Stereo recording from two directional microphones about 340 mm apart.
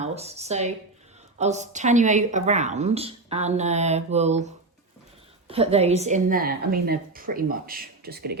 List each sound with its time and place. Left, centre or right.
0.0 s a woman's voice: centre